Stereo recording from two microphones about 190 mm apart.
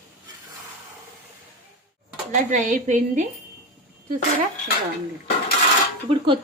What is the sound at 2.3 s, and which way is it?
Speech, 45° right (ahead or behind).